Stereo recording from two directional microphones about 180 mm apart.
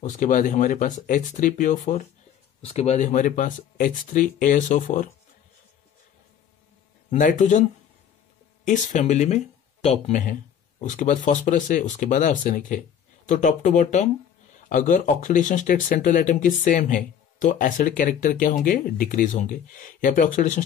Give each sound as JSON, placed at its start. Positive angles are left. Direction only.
{"t": 0.1, "sound": "speech", "side_deg": 45}
{"t": 7.1, "sound": "speech", "side_deg": 45}
{"t": 8.6, "sound": "speech", "side_deg": 45}